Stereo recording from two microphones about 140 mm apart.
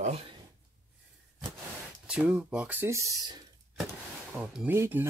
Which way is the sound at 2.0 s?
5° right (ahead or behind).